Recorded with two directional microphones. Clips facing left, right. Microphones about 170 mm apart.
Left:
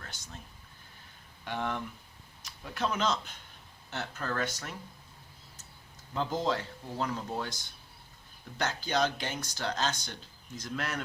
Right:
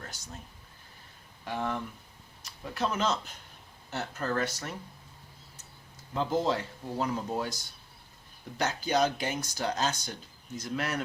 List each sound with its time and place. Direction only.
1.5 s a man's voice: centre (ahead or behind)
6.1 s speech: 10° right (ahead or behind)
8.5 s speech: 5° right (ahead or behind)